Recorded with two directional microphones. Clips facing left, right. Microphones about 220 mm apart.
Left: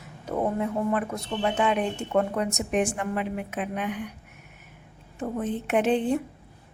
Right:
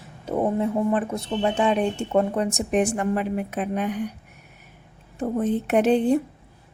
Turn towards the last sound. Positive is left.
turn(degrees=-40)  # may be behind; listen again after turning